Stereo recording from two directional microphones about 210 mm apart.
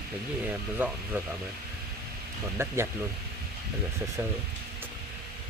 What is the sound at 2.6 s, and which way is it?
Speech, 10° right (ahead or behind).